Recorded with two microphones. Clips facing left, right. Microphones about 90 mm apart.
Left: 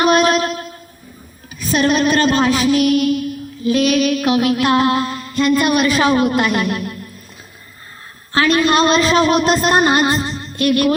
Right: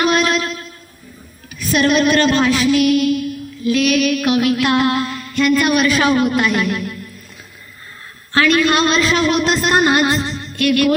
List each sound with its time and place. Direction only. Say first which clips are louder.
0.0 s a sound: left 3 dB; 45° left (ahead or behind)
1.5 s female singing: right 1 dB; 35° left (ahead or behind)
8.3 s female singing: even; 35° left (ahead or behind)